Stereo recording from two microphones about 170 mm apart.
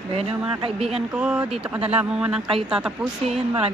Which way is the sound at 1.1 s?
5° right (ahead or behind).